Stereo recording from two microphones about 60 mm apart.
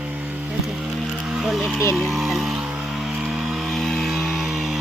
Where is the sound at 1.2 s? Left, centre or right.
Centre.